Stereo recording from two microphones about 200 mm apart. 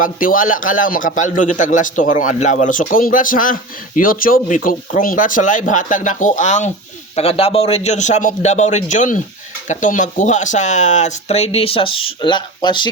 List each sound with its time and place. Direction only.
0.0 s a man's voice: 45° left (ahead or behind); by 12.9 s 25° left (ahead or behind)